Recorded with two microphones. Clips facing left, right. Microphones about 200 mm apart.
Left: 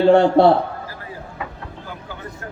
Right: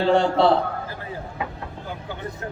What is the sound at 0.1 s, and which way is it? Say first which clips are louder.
Speech: left 6 dB; 55° left (ahead or behind).